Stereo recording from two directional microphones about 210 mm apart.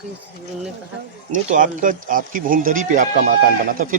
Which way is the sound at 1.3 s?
40° right (ahead or behind).